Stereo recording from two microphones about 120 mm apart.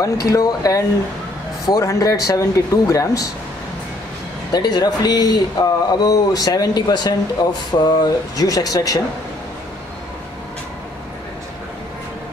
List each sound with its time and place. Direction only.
0.0 s speech: 30° left (ahead or behind)
4.5 s speech: 35° left (ahead or behind)